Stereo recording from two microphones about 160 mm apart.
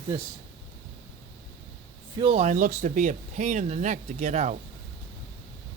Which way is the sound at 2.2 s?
45° right (ahead or behind).